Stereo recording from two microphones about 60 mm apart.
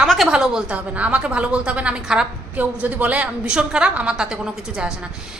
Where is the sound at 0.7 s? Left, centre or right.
Right.